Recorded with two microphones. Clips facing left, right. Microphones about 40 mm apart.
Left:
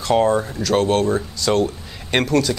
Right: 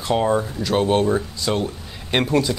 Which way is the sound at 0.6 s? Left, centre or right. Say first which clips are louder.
Left 1 dB; right.